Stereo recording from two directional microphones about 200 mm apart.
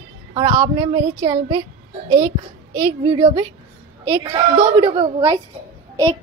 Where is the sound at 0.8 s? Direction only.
25° right (ahead or behind).